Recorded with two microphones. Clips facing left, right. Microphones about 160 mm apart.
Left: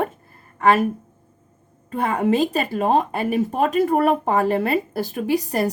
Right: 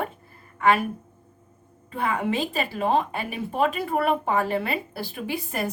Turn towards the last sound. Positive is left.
turn(degrees=40)  # may be behind; listen again after turning